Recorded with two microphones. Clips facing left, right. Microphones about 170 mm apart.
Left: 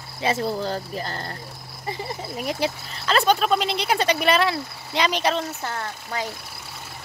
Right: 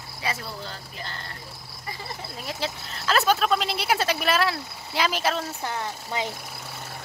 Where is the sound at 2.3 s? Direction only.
15° left (ahead or behind).